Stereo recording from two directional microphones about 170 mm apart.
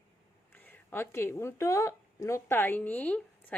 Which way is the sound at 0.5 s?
10° left (ahead or behind).